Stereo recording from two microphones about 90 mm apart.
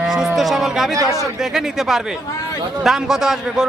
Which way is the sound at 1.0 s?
40° right (ahead or behind).